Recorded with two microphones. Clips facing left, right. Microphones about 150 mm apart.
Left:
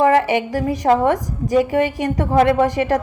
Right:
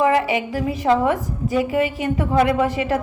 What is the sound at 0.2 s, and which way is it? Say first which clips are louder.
A woman's voice: left 3 dB; 45° left (ahead or behind).